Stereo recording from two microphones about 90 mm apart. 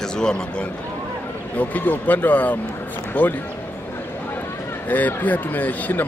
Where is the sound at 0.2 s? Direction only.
10° left (ahead or behind).